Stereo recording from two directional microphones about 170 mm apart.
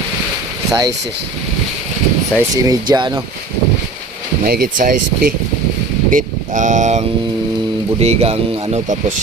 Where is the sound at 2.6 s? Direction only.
20° right (ahead or behind).